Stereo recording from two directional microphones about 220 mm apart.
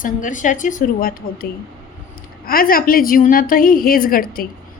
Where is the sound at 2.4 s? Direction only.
40° left (ahead or behind).